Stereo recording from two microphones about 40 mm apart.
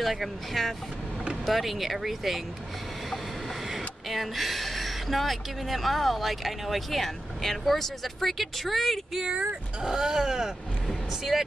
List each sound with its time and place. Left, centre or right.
0.0 s speech: centre
9.4 s speech: right
9.8 s speech: centre